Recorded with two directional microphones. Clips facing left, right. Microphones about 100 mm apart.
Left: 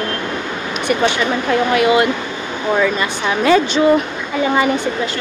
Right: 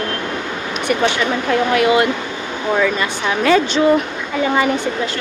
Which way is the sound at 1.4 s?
15° left (ahead or behind).